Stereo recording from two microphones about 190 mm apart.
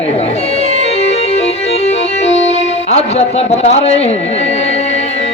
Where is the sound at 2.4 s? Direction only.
35° left (ahead or behind).